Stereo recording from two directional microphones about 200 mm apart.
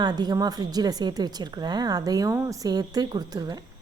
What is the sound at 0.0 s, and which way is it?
Speech, 20° right (ahead or behind).